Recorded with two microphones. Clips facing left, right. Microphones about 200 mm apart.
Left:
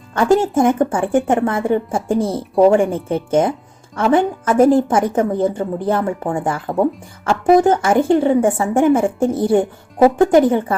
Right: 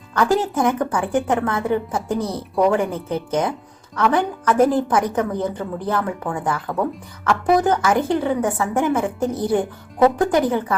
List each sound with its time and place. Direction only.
0.1 s a woman's voice: 25° left (ahead or behind)